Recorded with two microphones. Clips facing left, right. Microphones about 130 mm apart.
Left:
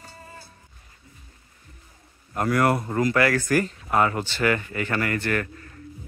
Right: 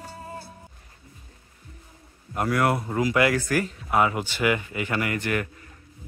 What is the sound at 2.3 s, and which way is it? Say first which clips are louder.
Speech: left 2 dB; centre (ahead or behind).